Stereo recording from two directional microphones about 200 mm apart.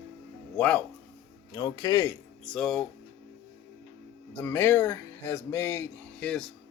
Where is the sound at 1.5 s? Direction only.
20° left (ahead or behind).